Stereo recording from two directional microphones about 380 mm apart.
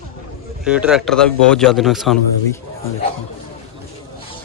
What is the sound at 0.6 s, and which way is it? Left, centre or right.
A man's voice, centre.